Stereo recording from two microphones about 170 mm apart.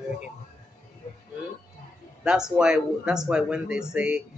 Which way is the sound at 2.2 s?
5° right (ahead or behind).